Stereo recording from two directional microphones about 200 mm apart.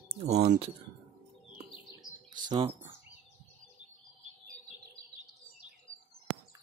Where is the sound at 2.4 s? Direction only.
20° right (ahead or behind).